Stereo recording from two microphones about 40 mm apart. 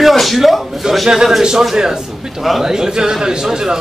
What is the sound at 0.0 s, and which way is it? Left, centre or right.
A man's voice, centre.